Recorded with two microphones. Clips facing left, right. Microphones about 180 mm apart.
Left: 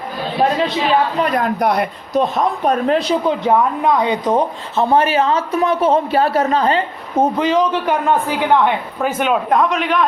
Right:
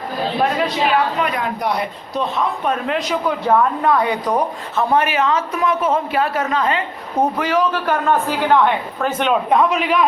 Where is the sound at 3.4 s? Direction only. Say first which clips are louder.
Left 1 dB; 15° left (ahead or behind); by 7.2 s 35° left (ahead or behind).